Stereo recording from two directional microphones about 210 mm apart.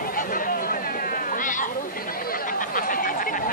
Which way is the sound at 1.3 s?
40° left (ahead or behind).